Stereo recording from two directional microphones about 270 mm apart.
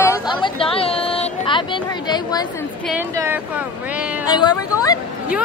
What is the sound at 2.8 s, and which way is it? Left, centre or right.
Speech, centre.